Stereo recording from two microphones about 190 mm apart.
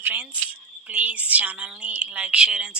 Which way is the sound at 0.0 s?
10° right (ahead or behind).